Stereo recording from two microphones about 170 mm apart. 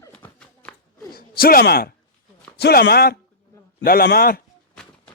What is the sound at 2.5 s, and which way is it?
A man's voice, 75° left (ahead or behind).